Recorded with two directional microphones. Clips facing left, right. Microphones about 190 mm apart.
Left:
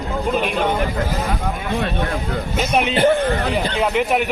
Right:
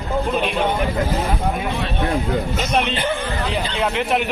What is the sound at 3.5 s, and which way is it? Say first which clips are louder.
Speech: left 3 dB; 5° left (ahead or behind).